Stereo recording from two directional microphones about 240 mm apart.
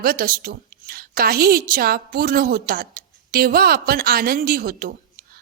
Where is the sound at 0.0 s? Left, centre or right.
Right.